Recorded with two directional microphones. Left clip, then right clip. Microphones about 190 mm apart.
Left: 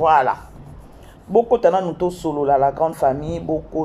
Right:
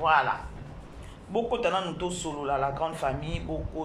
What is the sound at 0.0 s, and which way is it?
Speech, 35° left (ahead or behind).